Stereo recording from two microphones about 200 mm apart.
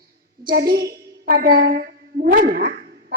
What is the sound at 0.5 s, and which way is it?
A woman's voice, 55° right (ahead or behind).